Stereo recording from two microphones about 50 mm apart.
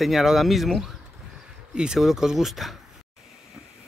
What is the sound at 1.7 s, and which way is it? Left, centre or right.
Speech, centre.